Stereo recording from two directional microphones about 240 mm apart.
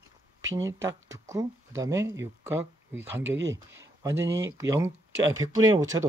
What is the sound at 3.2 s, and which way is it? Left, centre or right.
Speech, right.